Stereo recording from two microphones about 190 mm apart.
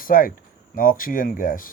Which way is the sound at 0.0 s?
45° left (ahead or behind).